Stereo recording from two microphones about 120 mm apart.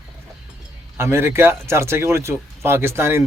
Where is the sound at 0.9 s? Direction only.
20° right (ahead or behind).